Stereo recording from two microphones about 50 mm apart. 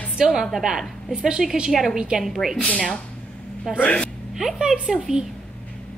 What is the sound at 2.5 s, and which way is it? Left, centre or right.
Speech, left.